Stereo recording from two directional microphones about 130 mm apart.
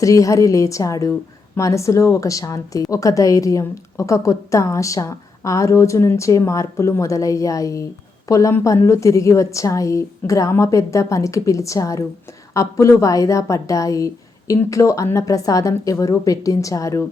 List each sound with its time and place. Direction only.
0.0 s a woman's voice: 25° left (ahead or behind)